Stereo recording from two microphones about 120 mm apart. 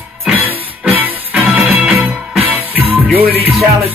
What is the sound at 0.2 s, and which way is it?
Music, 15° right (ahead or behind).